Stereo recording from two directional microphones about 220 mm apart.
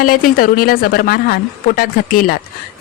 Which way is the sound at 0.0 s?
40° left (ahead or behind).